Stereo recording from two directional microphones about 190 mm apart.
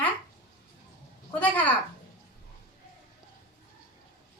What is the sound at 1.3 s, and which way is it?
Speech, 10° left (ahead or behind).